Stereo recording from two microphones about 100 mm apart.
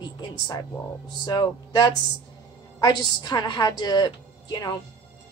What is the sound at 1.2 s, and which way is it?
A woman's voice, 45° left (ahead or behind).